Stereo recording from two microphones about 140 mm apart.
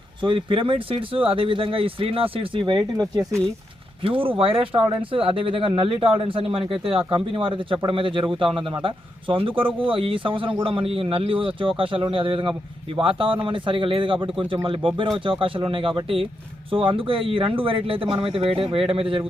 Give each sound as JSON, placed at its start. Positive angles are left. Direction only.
{"t": 0.2, "sound": "speech", "side_deg": -35}
{"t": 4.0, "sound": "speech", "side_deg": -40}